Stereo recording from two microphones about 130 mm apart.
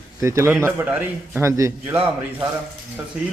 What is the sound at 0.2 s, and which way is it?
A man's voice, 20° right (ahead or behind).